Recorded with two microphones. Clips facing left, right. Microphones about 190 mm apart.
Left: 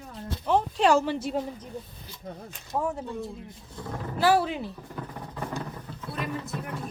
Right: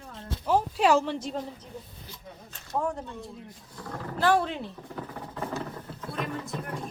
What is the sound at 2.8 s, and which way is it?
Speech, 5° left (ahead or behind).